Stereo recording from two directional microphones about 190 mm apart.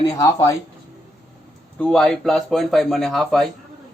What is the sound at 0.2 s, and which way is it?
Speech, 15° left (ahead or behind).